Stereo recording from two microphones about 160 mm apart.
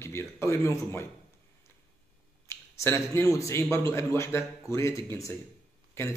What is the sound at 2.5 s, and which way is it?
A man's voice, 15° left (ahead or behind).